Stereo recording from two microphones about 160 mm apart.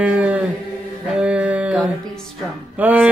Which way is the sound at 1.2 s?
5° right (ahead or behind).